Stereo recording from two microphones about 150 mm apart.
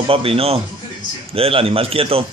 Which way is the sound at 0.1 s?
40° right (ahead or behind).